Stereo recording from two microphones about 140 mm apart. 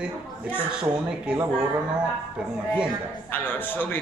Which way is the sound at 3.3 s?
15° left (ahead or behind).